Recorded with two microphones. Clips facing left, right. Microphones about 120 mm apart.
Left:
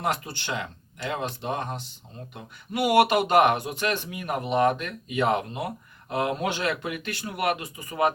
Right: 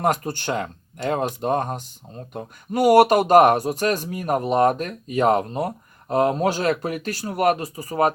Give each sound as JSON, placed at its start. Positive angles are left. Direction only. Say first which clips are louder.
{"t": 0.0, "sound": "speech", "louder": "right 6 dB", "side_deg": -45}